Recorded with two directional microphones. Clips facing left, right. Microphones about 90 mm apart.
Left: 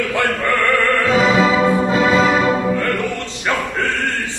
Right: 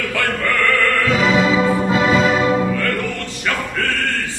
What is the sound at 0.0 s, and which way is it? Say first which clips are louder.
Music: left 2 dB; 20° left (ahead or behind).